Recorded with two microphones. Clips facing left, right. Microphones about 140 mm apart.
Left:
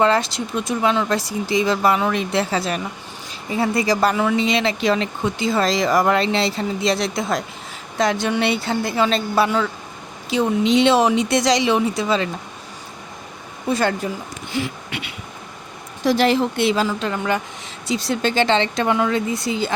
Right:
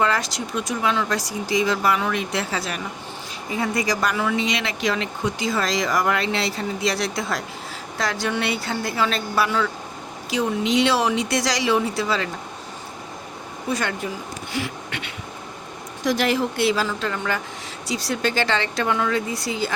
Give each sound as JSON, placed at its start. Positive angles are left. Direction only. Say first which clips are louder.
{"t": 0.0, "sound": "speech", "louder": "left 5 dB", "side_deg": 25}
{"t": 13.7, "sound": "speech", "louder": "left 6 dB", "side_deg": 30}
{"t": 14.5, "sound": "a sound", "louder": "left 4 dB", "side_deg": 20}
{"t": 16.0, "sound": "speech", "louder": "left 4 dB", "side_deg": 30}